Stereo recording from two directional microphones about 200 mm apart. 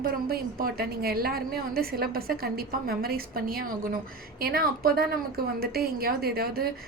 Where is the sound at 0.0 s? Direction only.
50° right (ahead or behind).